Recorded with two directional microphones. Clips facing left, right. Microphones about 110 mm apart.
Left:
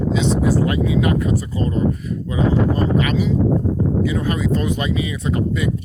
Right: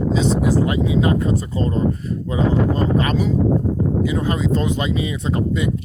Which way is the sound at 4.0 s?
25° right (ahead or behind).